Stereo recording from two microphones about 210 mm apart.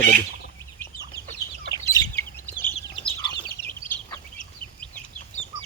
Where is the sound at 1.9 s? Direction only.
15° left (ahead or behind).